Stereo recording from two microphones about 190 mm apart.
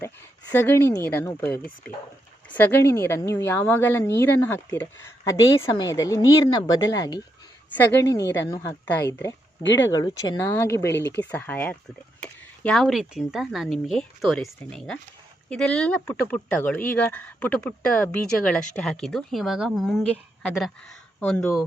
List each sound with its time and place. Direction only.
0.5 s speech: 10° left (ahead or behind)
8.3 s speech: 15° left (ahead or behind)
9.6 s speech: 70° left (ahead or behind)
9.9 s speech: 20° left (ahead or behind); by 20.1 s centre (ahead or behind)
21.2 s speech: 5° left (ahead or behind)